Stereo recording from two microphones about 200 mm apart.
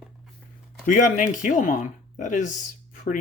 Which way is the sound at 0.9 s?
40° left (ahead or behind).